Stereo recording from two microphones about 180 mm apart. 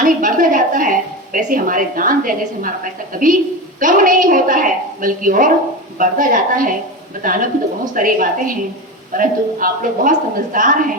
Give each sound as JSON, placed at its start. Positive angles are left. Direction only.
{"t": 0.0, "sound": "a woman's voice", "side_deg": -50}